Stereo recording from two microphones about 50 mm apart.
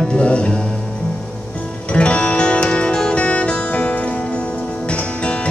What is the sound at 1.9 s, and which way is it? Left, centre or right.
Music, left.